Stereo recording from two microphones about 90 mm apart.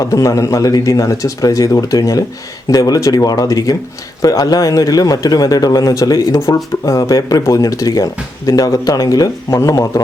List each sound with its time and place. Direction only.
0.1 s speech: 40° left (ahead or behind)